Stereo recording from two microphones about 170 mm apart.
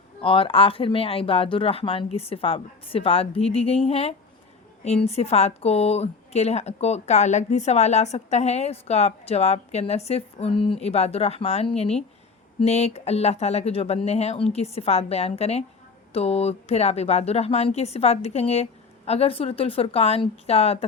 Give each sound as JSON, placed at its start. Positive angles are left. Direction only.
{"t": 0.2, "sound": "a woman's voice", "side_deg": 30}